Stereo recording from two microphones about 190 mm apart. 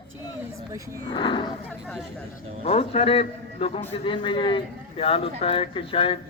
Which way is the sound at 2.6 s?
35° left (ahead or behind).